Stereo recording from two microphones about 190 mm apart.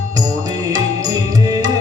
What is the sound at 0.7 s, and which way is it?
Music, 20° right (ahead or behind).